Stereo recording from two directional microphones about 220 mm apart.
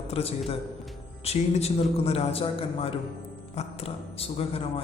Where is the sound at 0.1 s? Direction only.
25° left (ahead or behind).